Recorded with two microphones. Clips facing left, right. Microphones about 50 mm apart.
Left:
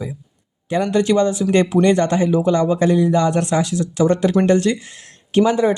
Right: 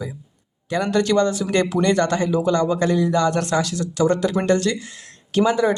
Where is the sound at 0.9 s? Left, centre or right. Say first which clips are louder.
Left 2 dB; centre.